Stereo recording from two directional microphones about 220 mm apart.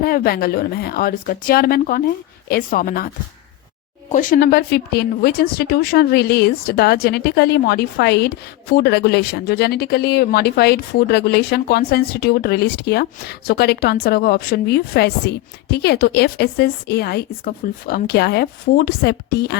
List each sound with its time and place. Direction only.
0.0 s speech: 40° left (ahead or behind)
4.1 s speech: 35° left (ahead or behind)